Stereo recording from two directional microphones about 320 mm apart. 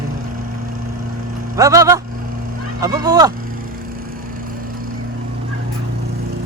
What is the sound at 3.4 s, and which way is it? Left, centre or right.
Vehicle, right.